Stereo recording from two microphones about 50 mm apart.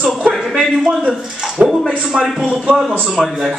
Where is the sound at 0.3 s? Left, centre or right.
Centre.